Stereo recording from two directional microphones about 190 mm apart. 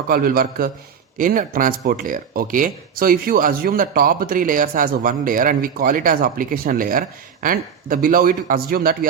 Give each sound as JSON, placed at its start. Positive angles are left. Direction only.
{"t": 0.1, "sound": "speech", "side_deg": -50}